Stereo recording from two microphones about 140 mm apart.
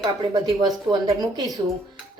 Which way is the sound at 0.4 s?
30° right (ahead or behind).